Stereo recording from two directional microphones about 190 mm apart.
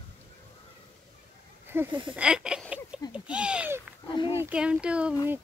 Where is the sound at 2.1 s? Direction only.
5° right (ahead or behind).